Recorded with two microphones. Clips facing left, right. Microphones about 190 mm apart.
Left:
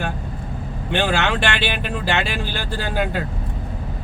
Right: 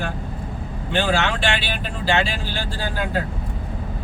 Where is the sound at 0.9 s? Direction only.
60° left (ahead or behind).